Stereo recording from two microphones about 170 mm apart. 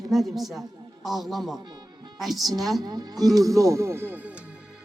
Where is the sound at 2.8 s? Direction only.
25° right (ahead or behind).